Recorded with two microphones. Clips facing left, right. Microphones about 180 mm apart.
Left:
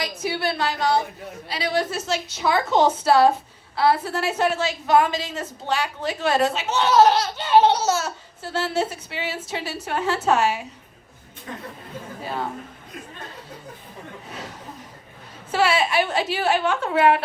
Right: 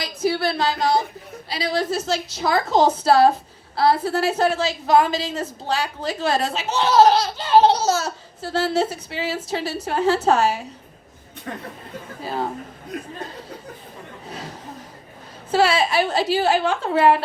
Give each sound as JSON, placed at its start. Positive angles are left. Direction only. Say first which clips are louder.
{"t": 0.0, "sound": "a woman's voice", "louder": "right 4 dB", "side_deg": -35}
{"t": 12.9, "sound": "speech", "louder": "right 8 dB", "side_deg": -70}
{"t": 15.5, "sound": "a woman's voice", "louder": "right 2 dB", "side_deg": -35}